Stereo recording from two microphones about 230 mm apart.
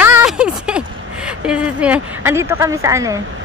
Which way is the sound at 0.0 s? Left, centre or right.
Centre.